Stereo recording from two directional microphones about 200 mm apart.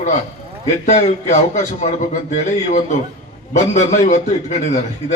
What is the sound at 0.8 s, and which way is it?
Speech, 35° left (ahead or behind).